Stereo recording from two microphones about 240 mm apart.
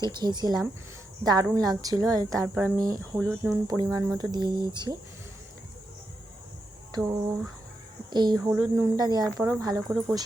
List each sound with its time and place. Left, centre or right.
0.0 s speech: centre
3.2 s speech: centre
3.7 s speech: centre
6.9 s speech: centre